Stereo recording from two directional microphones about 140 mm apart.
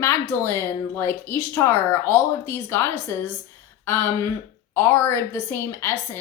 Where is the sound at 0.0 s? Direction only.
15° left (ahead or behind).